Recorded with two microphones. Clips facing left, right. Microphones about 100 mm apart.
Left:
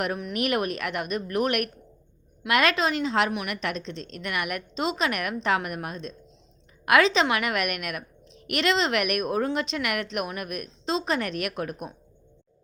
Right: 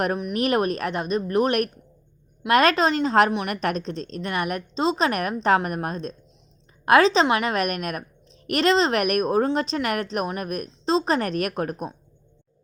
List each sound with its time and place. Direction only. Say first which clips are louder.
0.3 s a woman's voice: right 4 dB; 35° right (ahead or behind)